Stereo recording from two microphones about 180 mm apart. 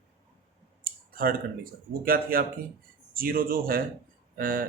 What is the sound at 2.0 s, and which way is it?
Speech, 55° right (ahead or behind).